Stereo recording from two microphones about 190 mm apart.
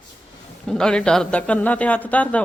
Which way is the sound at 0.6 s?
5° left (ahead or behind).